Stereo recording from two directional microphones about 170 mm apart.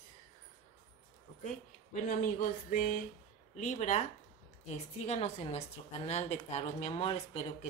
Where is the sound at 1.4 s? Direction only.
50° left (ahead or behind).